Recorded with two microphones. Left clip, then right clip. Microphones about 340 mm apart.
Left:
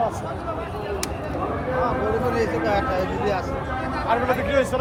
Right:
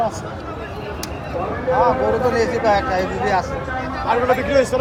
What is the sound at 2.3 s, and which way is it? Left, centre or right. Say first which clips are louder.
Speech: right 5 dB; right.